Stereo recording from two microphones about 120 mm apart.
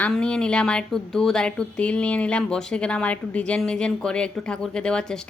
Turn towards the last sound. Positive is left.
turn(degrees=5)  # may be behind; listen again after turning